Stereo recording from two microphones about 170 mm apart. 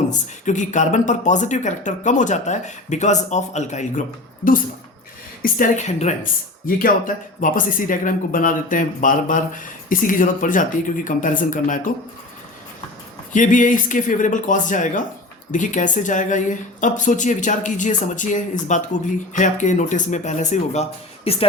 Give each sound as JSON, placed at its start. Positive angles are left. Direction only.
{"t": 0.1, "sound": "speech", "side_deg": 45}
{"t": 5.4, "sound": "speech", "side_deg": 50}
{"t": 6.7, "sound": "speech", "side_deg": 55}
{"t": 13.3, "sound": "speech", "side_deg": 50}